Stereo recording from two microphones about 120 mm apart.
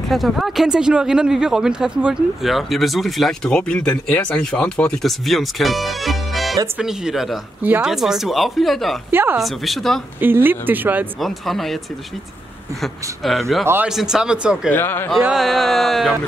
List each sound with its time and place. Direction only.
0.1 s speech: centre (ahead or behind)
9.1 s speech: 20° right (ahead or behind)
9.4 s speech: centre (ahead or behind)
10.2 s speech: 15° right (ahead or behind)
11.1 s speech: centre (ahead or behind)
12.8 s speech: centre (ahead or behind)
14.7 s speech: 20° left (ahead or behind)
15.2 s speech: centre (ahead or behind)